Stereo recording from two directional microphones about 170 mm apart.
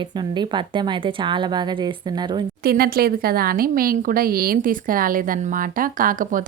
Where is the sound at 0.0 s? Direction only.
25° right (ahead or behind).